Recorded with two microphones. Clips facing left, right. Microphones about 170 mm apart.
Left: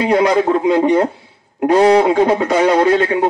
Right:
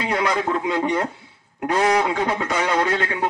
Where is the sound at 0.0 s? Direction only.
30° left (ahead or behind).